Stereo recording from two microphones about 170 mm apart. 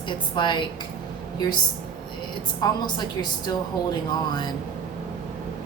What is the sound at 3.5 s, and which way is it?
Speech, 25° left (ahead or behind).